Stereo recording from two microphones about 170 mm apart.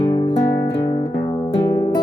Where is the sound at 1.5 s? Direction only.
25° left (ahead or behind).